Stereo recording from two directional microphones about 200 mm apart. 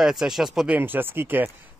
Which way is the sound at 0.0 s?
Centre (ahead or behind).